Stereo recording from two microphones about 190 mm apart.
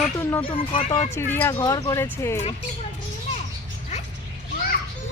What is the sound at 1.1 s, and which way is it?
Speech, 10° left (ahead or behind).